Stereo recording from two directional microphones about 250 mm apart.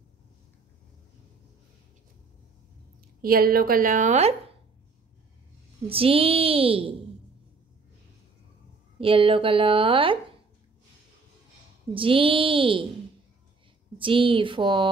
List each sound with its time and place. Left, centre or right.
3.2 s a woman's voice: right
5.9 s speech: right
9.0 s speech: right
11.9 s speech: right
13.9 s speech: right